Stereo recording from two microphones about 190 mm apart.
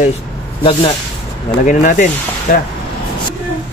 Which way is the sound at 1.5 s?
45° left (ahead or behind).